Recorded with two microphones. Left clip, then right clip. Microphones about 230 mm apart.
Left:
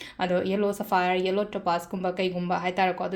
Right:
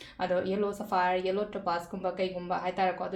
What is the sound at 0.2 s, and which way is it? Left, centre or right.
Speech, left.